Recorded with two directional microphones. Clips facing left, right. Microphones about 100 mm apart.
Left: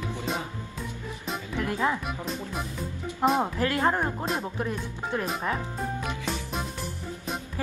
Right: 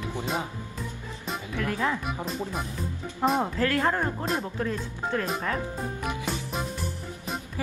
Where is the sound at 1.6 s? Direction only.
20° left (ahead or behind).